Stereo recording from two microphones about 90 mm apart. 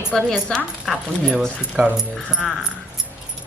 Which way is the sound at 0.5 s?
Centre (ahead or behind).